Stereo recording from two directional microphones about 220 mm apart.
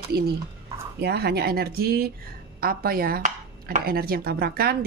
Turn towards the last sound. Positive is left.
turn(degrees=-45)  # may be behind; listen again after turning